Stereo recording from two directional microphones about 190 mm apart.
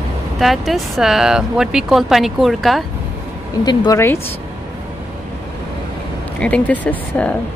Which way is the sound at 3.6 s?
20° left (ahead or behind).